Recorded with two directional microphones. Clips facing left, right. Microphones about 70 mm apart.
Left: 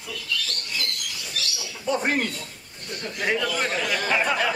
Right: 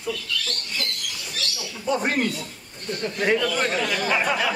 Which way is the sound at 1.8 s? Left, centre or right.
Centre.